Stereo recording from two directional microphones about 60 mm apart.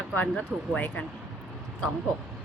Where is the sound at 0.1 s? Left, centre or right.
Left.